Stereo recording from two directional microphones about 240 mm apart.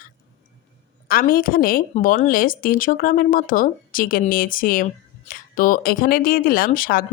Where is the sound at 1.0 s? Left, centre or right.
Left.